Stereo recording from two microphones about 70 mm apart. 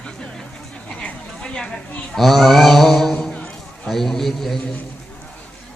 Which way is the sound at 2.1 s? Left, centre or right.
Centre.